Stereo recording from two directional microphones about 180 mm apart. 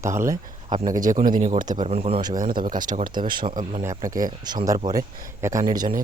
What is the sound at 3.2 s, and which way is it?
Speech, 25° right (ahead or behind).